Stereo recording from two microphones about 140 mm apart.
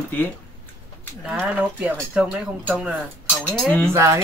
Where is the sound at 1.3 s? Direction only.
10° right (ahead or behind).